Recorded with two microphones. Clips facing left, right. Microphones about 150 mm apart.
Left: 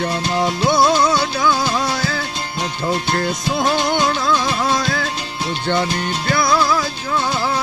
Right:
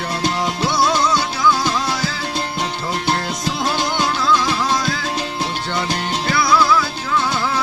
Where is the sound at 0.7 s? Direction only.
55° left (ahead or behind).